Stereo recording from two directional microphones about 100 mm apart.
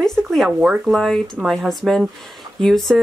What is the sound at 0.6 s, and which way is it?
Speech, 5° right (ahead or behind).